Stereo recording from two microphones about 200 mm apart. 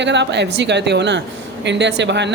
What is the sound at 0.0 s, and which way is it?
Speech, 60° right (ahead or behind).